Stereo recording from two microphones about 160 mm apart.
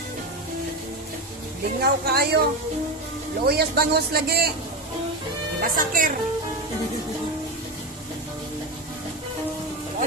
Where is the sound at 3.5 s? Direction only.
75° right (ahead or behind).